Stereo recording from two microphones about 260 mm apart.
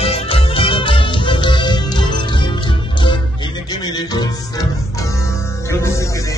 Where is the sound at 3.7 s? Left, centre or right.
Centre.